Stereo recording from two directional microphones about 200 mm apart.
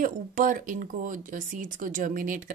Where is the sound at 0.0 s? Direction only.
40° right (ahead or behind).